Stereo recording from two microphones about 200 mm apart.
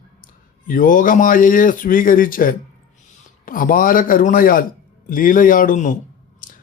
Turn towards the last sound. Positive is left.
turn(degrees=45)  # may be behind; listen again after turning